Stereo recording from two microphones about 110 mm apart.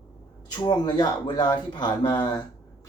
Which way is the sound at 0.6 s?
40° left (ahead or behind).